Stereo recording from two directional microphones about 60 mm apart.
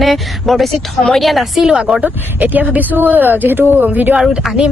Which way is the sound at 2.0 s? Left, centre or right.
Right.